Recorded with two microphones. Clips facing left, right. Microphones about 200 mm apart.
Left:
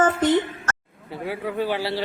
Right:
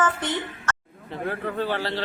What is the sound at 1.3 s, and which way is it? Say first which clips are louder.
Speech: left 2 dB; 10° left (ahead or behind).